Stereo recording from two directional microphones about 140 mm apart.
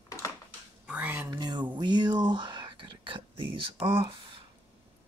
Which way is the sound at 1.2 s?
30° right (ahead or behind).